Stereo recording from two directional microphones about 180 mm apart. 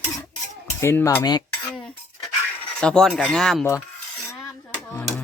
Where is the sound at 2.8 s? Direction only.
5° left (ahead or behind).